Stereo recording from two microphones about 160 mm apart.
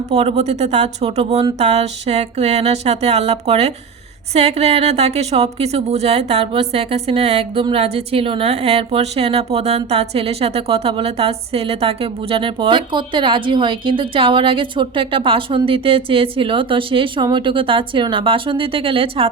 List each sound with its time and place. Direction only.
0.1 s a woman's voice: 40° right (ahead or behind)
1.5 s a sound: 45° right (ahead or behind)
4.4 s a woman's voice: 40° right (ahead or behind)